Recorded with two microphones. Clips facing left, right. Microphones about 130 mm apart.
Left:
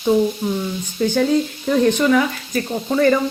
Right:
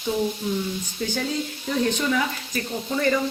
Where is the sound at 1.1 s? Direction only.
65° left (ahead or behind).